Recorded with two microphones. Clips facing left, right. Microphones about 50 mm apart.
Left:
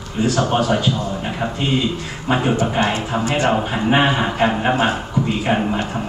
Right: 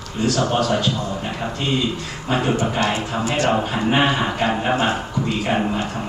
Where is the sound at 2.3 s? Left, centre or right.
Centre.